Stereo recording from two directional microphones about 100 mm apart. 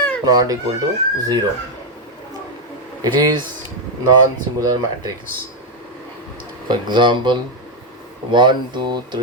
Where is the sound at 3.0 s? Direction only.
45° right (ahead or behind).